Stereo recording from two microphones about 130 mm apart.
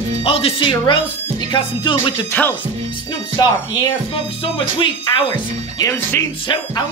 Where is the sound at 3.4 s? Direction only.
35° left (ahead or behind).